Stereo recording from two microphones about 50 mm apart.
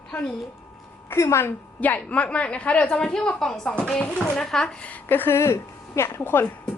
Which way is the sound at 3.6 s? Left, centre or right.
Left.